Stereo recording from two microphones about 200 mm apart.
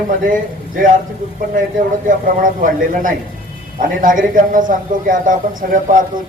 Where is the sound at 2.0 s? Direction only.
40° right (ahead or behind).